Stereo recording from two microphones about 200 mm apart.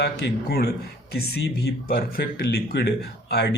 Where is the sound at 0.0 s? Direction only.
55° left (ahead or behind).